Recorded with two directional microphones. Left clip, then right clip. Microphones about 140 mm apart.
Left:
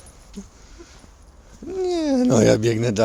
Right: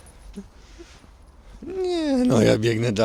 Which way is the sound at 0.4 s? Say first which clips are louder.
Left 1 dB; 35° left (ahead or behind).